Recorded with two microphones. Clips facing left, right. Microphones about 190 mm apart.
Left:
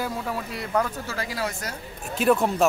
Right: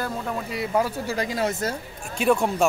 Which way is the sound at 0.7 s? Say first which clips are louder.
Right 1 dB; 15° right (ahead or behind).